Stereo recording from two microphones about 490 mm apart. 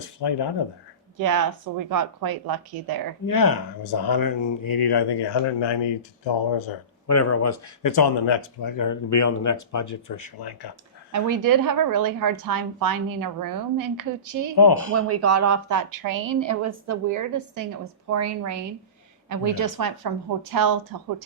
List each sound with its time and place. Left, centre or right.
0.2 s speech: left
1.2 s a woman's voice: right
3.2 s speech: left
7.1 s speech: left
8.8 s speech: left
11.1 s a woman's voice: right
14.5 s speech: left
14.9 s a woman's voice: right